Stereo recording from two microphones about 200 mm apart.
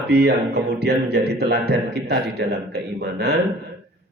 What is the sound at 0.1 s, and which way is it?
Speech, 55° right (ahead or behind).